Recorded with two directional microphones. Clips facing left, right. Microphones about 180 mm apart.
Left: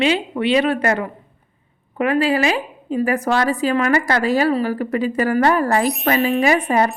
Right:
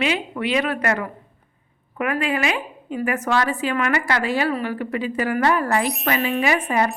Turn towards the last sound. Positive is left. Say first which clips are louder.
# left 4 dB
turn(degrees=40)  # may be behind; listen again after turning